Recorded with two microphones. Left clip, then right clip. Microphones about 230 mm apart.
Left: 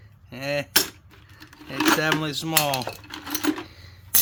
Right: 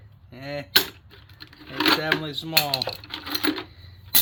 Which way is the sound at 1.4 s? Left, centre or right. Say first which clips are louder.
Even; centre.